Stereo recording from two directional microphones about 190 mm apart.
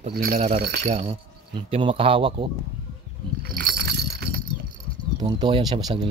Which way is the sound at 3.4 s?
55° right (ahead or behind).